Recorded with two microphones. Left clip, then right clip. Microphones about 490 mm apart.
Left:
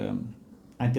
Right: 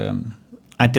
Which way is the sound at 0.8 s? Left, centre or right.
Right.